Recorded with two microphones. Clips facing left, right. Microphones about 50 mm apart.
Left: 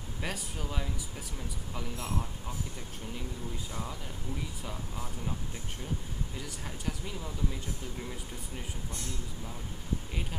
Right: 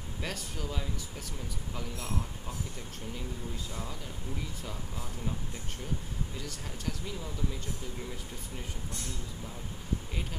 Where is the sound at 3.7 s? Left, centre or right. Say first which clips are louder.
Left 1 dB; centre.